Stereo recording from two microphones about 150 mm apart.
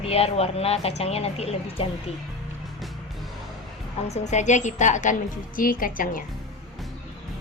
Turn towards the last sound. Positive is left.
turn(degrees=65)  # may be behind; listen again after turning